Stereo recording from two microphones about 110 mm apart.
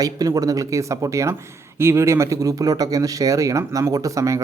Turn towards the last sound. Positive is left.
turn(degrees=-30)  # may be behind; listen again after turning